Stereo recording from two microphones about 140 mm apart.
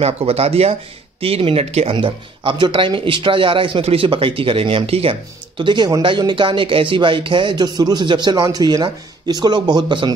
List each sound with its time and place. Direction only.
0.0 s speech: 45° right (ahead or behind)
5.6 s speech: 35° right (ahead or behind)